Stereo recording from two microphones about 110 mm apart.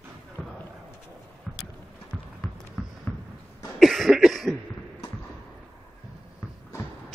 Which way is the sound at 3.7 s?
Centre (ahead or behind).